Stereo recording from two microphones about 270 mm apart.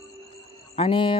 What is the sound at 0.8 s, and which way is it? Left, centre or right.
Speech, centre.